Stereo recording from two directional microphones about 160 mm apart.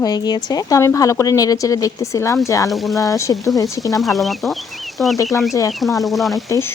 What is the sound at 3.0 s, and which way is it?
Speech, 20° left (ahead or behind).